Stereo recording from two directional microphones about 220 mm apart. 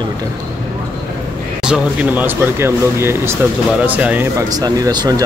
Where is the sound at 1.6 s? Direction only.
5° right (ahead or behind).